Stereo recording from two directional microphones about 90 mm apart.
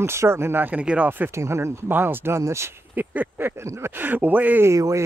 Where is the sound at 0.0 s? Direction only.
30° right (ahead or behind).